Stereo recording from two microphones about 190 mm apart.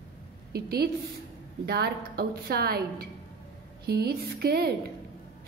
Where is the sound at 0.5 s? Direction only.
55° right (ahead or behind).